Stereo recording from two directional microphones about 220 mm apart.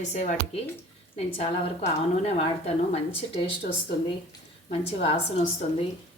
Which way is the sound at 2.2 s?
30° left (ahead or behind).